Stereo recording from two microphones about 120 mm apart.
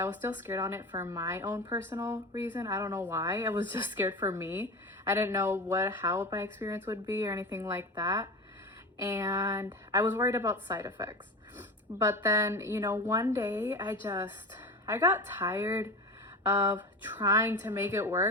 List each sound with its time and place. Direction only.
0.0 s a woman's voice: 15° right (ahead or behind)
7.9 s speech: 30° right (ahead or behind)
9.0 s a woman's voice: 20° right (ahead or behind)
14.0 s a woman's voice: 30° right (ahead or behind)
14.8 s a woman's voice: 20° right (ahead or behind)